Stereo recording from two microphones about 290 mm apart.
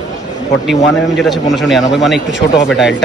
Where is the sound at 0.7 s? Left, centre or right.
Centre.